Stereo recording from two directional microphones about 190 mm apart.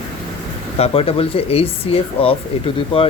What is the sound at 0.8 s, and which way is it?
Speech, 30° left (ahead or behind).